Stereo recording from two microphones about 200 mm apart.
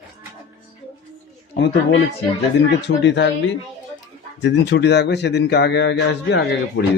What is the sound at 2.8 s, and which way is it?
Speech, 60° left (ahead or behind).